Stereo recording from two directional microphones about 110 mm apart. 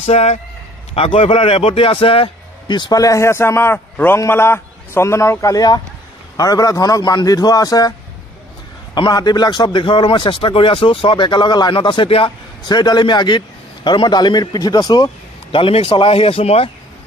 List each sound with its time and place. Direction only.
0.0 s speech: 70° left (ahead or behind)
0.9 s a man's voice: 60° left (ahead or behind); by 7.9 s 35° left (ahead or behind)
8.9 s a man's voice: 40° left (ahead or behind)
15.5 s speech: 55° left (ahead or behind)